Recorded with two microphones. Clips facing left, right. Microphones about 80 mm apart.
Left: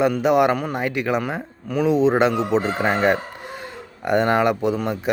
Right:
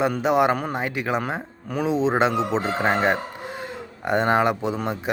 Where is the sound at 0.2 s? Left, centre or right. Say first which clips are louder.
Left 1 dB; right.